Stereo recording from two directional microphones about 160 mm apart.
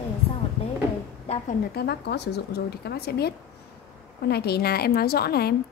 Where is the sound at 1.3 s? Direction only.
40° left (ahead or behind).